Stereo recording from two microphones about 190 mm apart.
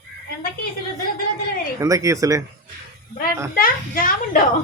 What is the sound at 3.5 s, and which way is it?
Speech, 50° left (ahead or behind).